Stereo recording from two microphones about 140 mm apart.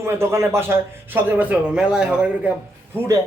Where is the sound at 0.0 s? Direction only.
20° right (ahead or behind).